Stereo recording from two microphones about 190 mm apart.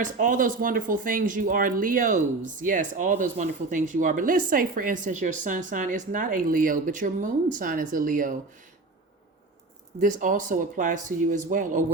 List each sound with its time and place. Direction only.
0.0 s speech: 40° right (ahead or behind)
10.0 s speech: 45° right (ahead or behind)